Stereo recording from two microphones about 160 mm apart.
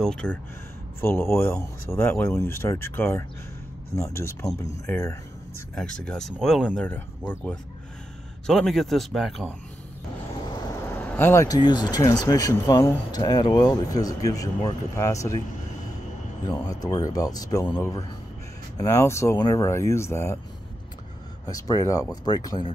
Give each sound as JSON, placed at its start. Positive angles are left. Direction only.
{"t": 0.0, "sound": "speech", "side_deg": 5}
{"t": 1.0, "sound": "speech", "side_deg": 15}
{"t": 5.8, "sound": "speech", "side_deg": 5}
{"t": 6.8, "sound": "speech", "side_deg": 10}
{"t": 10.9, "sound": "speech", "side_deg": 10}
{"t": 16.4, "sound": "speech", "side_deg": 25}
{"t": 21.5, "sound": "speech", "side_deg": 20}